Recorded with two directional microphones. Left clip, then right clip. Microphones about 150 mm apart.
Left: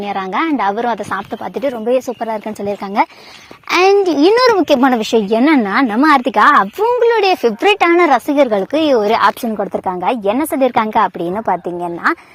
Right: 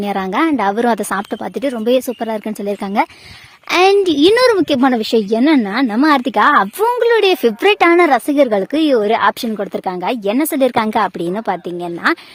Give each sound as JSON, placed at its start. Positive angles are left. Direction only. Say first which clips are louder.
{"t": 0.0, "sound": "speech", "louder": "right 1 dB", "side_deg": -35}
{"t": 1.5, "sound": "speech", "louder": "even", "side_deg": -35}
{"t": 11.5, "sound": "a woman's voice", "louder": "left 3 dB", "side_deg": -15}